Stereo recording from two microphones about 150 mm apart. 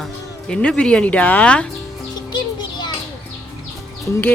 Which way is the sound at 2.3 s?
30° left (ahead or behind).